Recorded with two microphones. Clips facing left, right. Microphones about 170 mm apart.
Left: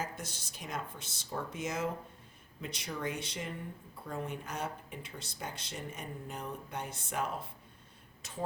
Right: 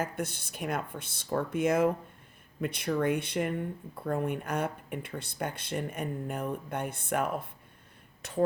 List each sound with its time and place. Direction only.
0.0 s speech: 60° right (ahead or behind)